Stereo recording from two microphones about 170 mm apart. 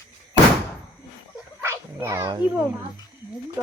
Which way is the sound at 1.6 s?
15° right (ahead or behind).